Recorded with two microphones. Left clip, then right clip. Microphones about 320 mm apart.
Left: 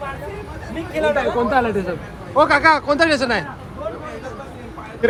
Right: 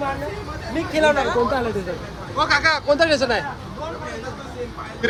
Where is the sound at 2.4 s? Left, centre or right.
Centre.